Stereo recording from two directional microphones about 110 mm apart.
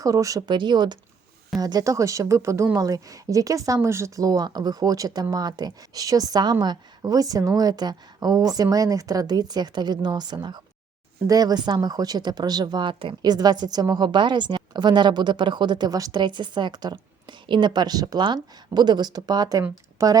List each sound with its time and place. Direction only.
0.0 s speech: 30° right (ahead or behind)
0.5 s speech: 45° right (ahead or behind)